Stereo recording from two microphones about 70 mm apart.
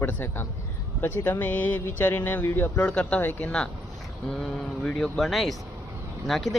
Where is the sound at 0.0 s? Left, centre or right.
Left.